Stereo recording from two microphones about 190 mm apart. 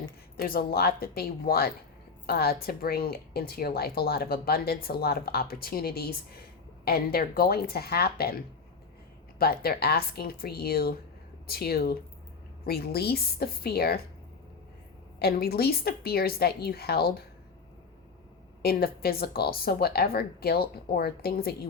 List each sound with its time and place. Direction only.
0.3 s speech: 50° left (ahead or behind)
15.2 s a woman's voice: 55° left (ahead or behind)
18.6 s speech: 55° left (ahead or behind)